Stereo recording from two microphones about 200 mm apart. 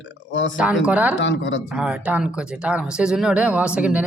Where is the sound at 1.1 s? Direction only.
65° left (ahead or behind).